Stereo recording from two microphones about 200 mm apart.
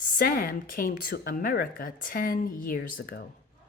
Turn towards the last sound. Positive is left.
turn(degrees=50)  # may be behind; listen again after turning